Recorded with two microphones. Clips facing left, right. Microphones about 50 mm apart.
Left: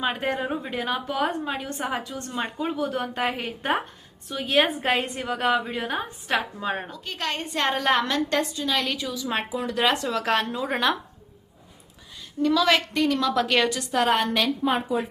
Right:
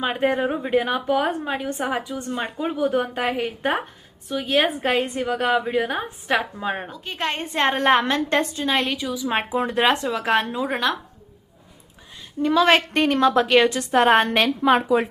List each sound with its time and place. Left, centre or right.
0.0 s a woman's voice: centre
3.2 s a woman's voice: centre
7.0 s a woman's voice: right
8.9 s a woman's voice: centre
9.2 s a woman's voice: right
10.1 s a woman's voice: centre
10.7 s a woman's voice: centre
12.4 s a woman's voice: right
13.3 s a woman's voice: centre
13.7 s a woman's voice: right
14.6 s speech: right